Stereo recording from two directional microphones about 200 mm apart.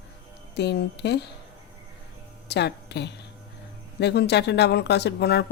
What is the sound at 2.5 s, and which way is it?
A woman's voice, 55° left (ahead or behind).